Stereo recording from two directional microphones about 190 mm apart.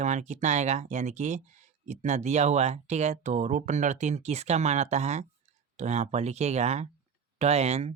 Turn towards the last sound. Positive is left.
turn(degrees=-35)  # may be behind; listen again after turning